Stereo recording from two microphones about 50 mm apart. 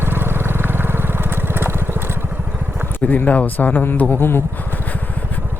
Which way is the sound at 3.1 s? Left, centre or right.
Left.